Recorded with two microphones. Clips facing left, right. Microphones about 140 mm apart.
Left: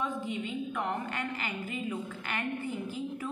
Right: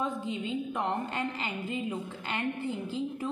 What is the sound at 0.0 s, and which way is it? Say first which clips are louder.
A woman's voice: right 1 dB; 30° right (ahead or behind).